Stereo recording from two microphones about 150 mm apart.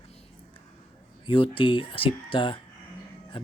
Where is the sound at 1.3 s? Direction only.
35° left (ahead or behind).